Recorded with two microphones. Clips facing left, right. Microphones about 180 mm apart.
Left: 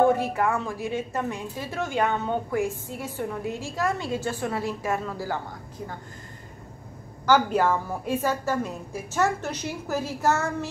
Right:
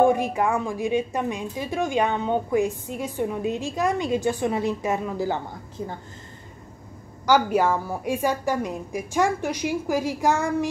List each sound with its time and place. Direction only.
0.0 s a woman's voice: 15° right (ahead or behind)
7.2 s a woman's voice: 10° right (ahead or behind)